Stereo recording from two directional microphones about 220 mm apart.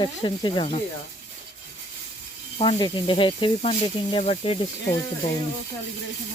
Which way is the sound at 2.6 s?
20° left (ahead or behind).